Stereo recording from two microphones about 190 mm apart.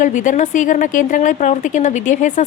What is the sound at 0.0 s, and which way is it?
A woman's voice, 40° left (ahead or behind).